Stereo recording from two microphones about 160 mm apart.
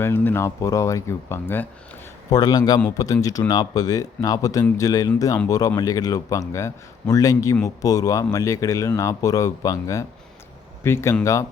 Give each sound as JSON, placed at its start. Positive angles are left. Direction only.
{"t": 0.0, "sound": "a man's voice", "side_deg": 15}